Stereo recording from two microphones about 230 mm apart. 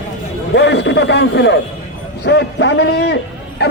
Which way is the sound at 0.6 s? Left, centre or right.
Left.